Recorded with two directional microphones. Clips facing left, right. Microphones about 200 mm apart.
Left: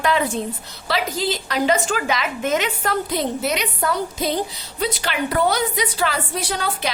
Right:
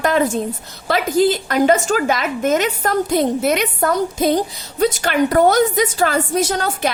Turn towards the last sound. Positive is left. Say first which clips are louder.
# right 6 dB
turn(degrees=-45)  # may be behind; listen again after turning